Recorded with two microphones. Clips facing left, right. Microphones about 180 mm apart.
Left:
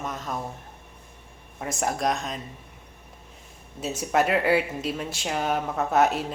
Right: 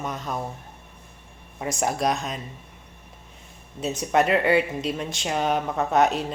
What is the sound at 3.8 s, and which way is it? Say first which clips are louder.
Speech: right 2 dB; 5° left (ahead or behind).